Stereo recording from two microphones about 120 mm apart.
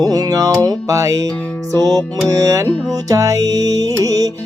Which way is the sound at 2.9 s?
30° right (ahead or behind).